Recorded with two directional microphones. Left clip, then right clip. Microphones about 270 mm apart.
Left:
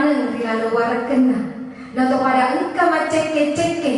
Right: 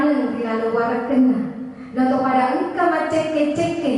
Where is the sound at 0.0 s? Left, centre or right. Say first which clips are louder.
Left 1 dB; centre.